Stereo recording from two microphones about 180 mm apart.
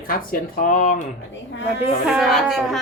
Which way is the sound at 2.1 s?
Centre (ahead or behind).